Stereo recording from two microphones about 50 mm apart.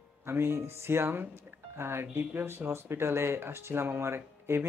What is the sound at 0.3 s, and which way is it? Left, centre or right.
Speech, right.